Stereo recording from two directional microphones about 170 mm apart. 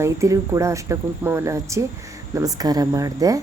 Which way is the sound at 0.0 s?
20° right (ahead or behind).